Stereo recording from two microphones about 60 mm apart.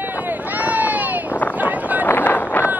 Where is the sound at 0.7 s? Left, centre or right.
Right.